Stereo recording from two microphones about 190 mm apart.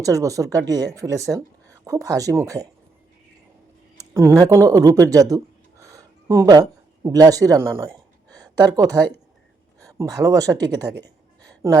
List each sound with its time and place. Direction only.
0.0 s speech: 15° right (ahead or behind)
3.9 s speech: 15° right (ahead or behind)
11.4 s a sound: 20° right (ahead or behind)